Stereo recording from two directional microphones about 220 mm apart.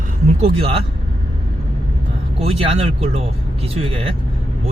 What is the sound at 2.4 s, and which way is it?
Speech, 25° right (ahead or behind).